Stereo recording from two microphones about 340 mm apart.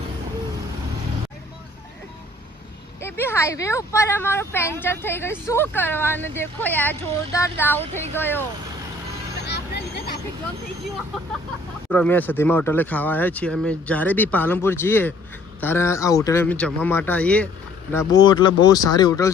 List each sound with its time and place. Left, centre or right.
3.0 s speech: centre
9.5 s vehicle: left
11.9 s speech: centre